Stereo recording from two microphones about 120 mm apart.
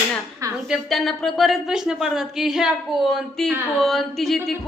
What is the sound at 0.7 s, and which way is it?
Speech, centre (ahead or behind).